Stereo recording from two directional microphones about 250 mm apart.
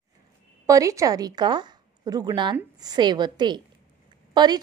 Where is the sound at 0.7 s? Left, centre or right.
Centre.